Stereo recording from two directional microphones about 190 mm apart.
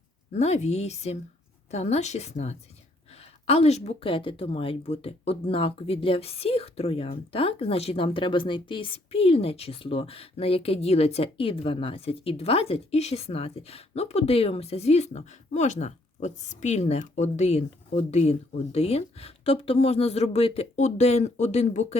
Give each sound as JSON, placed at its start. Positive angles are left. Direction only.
{"t": 0.3, "sound": "speech", "side_deg": 35}